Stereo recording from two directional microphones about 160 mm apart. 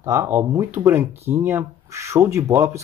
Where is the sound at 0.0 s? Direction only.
20° right (ahead or behind).